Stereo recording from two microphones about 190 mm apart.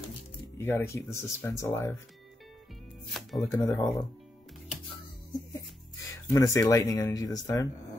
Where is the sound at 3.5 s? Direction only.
20° left (ahead or behind).